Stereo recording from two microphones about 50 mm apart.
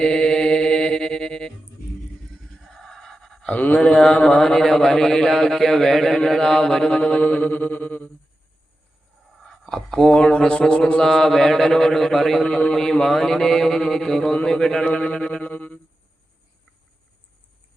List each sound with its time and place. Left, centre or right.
0.0 s chant: centre
2.6 s gasp: centre
3.5 s mantra: left
3.8 s a man's voice: centre
6.9 s mantra: centre
7.2 s music: left
9.4 s speech: centre
12.5 s mantra: centre
12.7 s speech: centre
14.8 s music: left